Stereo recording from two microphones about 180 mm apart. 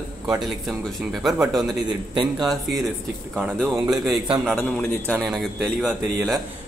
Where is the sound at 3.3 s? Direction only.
15° right (ahead or behind).